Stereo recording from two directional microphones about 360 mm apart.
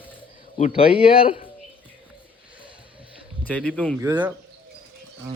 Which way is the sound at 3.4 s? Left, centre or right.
Centre.